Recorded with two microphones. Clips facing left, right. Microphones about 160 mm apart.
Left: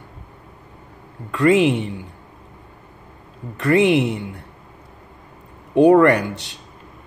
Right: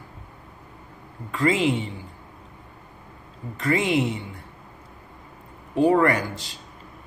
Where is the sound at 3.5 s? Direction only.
65° left (ahead or behind).